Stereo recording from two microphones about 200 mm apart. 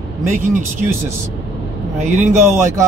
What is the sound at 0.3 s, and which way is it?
Speech, 40° right (ahead or behind).